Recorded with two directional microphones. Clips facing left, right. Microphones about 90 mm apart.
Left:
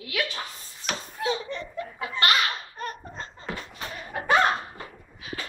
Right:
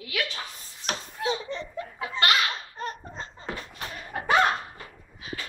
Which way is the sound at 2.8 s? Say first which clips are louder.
Even; 20° right (ahead or behind).